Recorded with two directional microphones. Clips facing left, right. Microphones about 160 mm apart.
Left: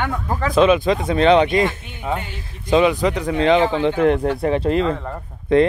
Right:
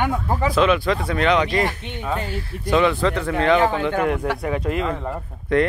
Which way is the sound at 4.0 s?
30° left (ahead or behind).